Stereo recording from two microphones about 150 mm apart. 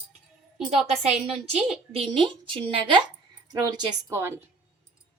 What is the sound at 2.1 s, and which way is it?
Speech, 35° right (ahead or behind).